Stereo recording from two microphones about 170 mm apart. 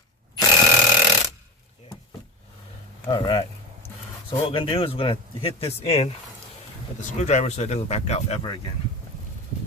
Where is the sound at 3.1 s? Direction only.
25° left (ahead or behind).